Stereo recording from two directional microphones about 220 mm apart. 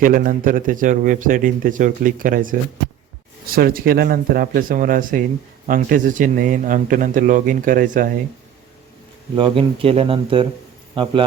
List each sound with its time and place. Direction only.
0.0 s a man's voice: 40° right (ahead or behind)
9.3 s a man's voice: 25° right (ahead or behind)